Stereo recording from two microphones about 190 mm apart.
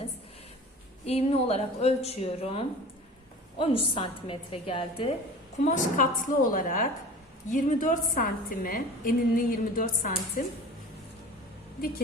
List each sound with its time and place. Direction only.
1.0 s a woman's voice: 30° left (ahead or behind)
5.6 s a woman's voice: 45° left (ahead or behind)